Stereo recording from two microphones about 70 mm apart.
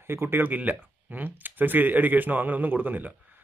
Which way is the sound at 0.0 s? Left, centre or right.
Right.